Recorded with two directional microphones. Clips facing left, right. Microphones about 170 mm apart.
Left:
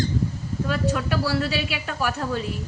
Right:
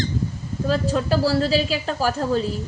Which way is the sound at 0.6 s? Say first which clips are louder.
Right 4 dB; 30° right (ahead or behind).